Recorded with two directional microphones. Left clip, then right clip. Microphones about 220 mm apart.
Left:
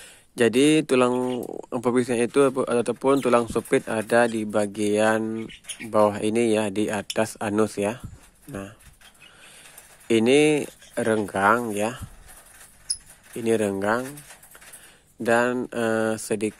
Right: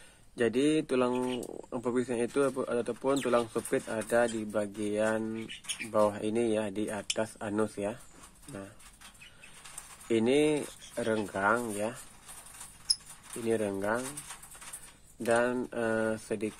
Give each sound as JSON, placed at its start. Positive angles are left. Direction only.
{"t": 0.4, "sound": "speech", "side_deg": 40}
{"t": 10.0, "sound": "speech", "side_deg": 40}
{"t": 13.5, "sound": "speech", "side_deg": 40}
{"t": 15.2, "sound": "speech", "side_deg": 40}